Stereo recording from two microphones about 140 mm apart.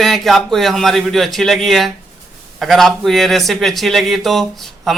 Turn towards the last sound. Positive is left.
turn(degrees=0)  # may be behind; listen again after turning